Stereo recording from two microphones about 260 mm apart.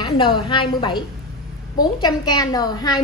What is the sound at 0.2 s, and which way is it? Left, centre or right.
A woman's voice, centre.